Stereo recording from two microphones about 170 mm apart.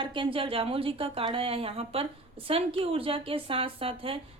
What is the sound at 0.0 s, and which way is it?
A woman's voice, 30° right (ahead or behind).